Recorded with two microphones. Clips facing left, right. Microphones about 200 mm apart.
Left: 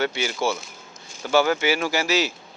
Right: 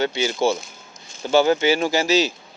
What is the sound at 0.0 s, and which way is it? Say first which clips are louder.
Speech: right 4 dB; 20° right (ahead or behind).